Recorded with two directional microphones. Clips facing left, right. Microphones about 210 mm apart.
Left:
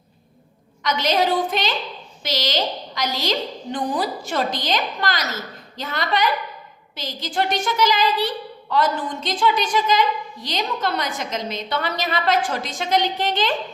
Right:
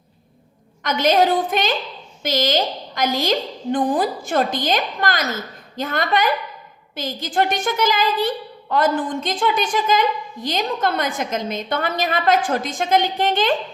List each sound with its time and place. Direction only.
0.8 s a woman's voice: 50° right (ahead or behind)